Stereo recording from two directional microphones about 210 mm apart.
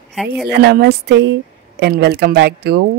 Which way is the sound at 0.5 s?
50° right (ahead or behind).